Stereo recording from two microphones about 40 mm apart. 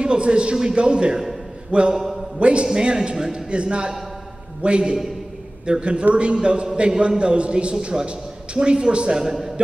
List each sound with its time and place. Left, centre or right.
0.0 s a man's voice: right
2.0 s a man's voice: centre
2.3 s a man's voice: right
3.4 s a man's voice: right